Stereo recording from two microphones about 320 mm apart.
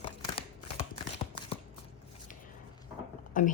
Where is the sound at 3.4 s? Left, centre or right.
Left.